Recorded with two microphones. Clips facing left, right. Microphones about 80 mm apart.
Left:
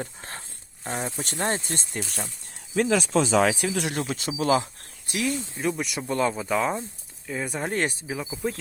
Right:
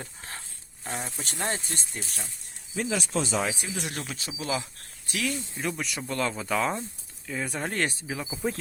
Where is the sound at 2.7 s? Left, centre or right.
Left.